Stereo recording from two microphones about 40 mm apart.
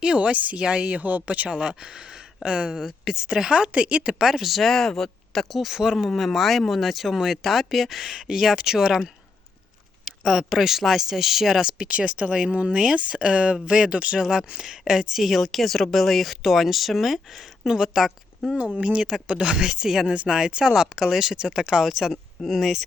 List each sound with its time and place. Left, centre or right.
0.0 s speech: right
1.5 s speech: centre
2.7 s speech: centre
3.7 s speech: right
4.2 s speech: centre
5.7 s speech: centre
6.1 s speech: centre
10.1 s speech: centre
11.8 s speech: right
12.3 s speech: centre
18.8 s speech: right; by 22.8 s centre